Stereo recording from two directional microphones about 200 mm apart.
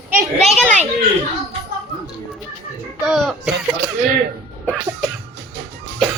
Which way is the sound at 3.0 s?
Centre (ahead or behind).